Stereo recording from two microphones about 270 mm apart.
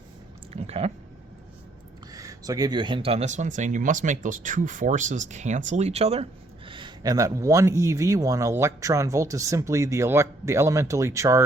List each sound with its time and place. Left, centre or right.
0.5 s speech: right
2.1 s a man's voice: centre